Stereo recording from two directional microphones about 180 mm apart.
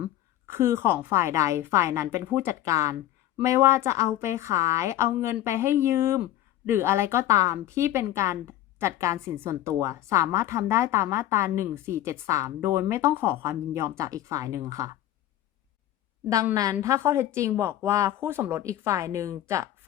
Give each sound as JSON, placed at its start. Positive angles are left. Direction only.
{"t": 0.0, "sound": "a woman's voice", "side_deg": -15}
{"t": 16.3, "sound": "speech", "side_deg": -20}